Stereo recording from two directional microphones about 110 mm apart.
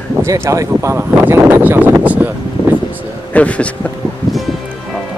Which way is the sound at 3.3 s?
10° left (ahead or behind).